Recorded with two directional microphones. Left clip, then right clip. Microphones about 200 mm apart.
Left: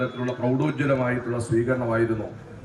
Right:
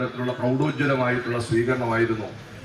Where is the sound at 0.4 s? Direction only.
45° left (ahead or behind).